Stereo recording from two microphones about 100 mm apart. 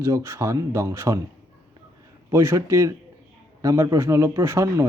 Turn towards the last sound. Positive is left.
turn(degrees=-25)  # may be behind; listen again after turning